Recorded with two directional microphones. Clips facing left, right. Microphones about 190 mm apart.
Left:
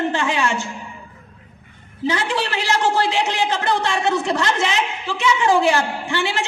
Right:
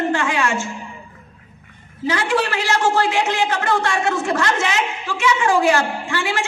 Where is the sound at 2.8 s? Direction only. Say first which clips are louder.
Right 1 dB; 15° left (ahead or behind).